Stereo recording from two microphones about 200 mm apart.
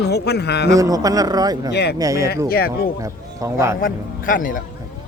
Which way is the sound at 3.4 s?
15° right (ahead or behind).